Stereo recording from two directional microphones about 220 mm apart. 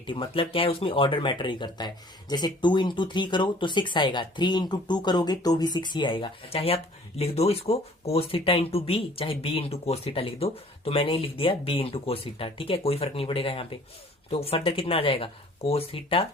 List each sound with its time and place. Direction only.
0.0 s speech: 25° left (ahead or behind)